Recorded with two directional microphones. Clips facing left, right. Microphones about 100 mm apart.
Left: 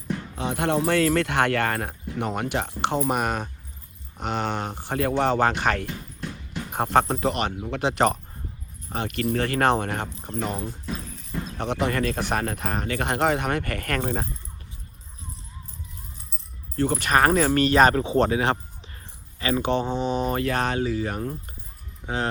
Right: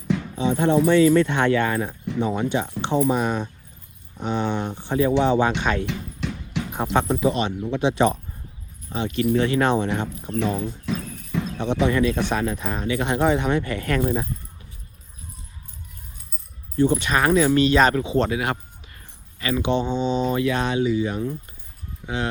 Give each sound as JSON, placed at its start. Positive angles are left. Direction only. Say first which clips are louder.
{"t": 0.5, "sound": "speech", "louder": "right 5 dB", "side_deg": 70}
{"t": 5.8, "sound": "a sound", "louder": "right 5 dB", "side_deg": -90}
{"t": 6.7, "sound": "speech", "louder": "left 1 dB", "side_deg": 60}
{"t": 10.3, "sound": "cricket", "louder": "right 5 dB", "side_deg": -85}
{"t": 11.5, "sound": "speech", "louder": "right 4 dB", "side_deg": 55}
{"t": 16.7, "sound": "speech", "louder": "right 2 dB", "side_deg": 55}
{"t": 22.0, "sound": "speech", "louder": "even", "side_deg": 40}